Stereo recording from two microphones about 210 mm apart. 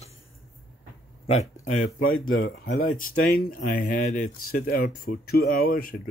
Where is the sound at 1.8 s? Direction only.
85° left.